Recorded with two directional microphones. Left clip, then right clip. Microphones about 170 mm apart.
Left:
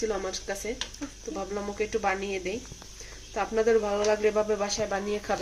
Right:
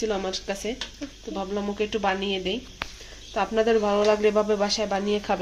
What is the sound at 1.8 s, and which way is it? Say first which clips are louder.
Speech: right 2 dB; 30° right (ahead or behind).